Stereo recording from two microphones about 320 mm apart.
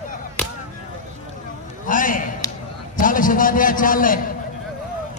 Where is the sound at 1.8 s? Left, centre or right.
Left.